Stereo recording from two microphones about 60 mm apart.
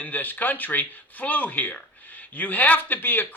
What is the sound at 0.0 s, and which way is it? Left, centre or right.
A man's voice, left.